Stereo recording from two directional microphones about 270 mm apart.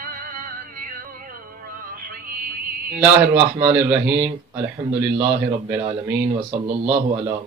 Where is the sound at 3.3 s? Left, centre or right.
Centre.